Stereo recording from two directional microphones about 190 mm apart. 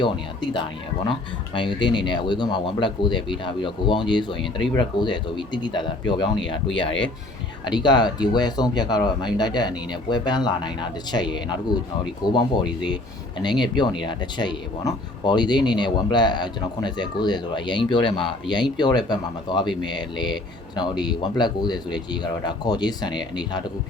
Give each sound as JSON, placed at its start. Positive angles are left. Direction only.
{"t": 0.0, "sound": "speech", "side_deg": 25}